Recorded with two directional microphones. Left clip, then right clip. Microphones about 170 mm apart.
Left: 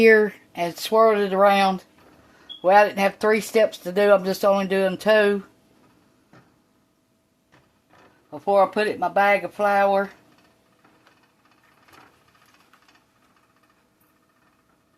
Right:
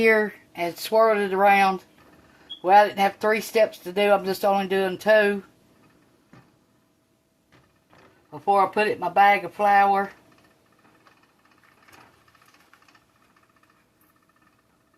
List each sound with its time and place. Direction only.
0.0 s speech: 75° left (ahead or behind)
8.3 s speech: 55° left (ahead or behind)